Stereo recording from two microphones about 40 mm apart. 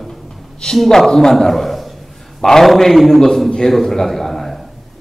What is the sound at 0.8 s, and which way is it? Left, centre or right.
A man's voice, centre.